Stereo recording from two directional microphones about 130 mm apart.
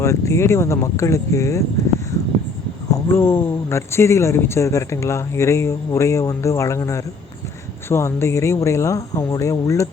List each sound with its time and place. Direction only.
0.0 s speech: 20° left (ahead or behind)
2.9 s speech: 20° left (ahead or behind)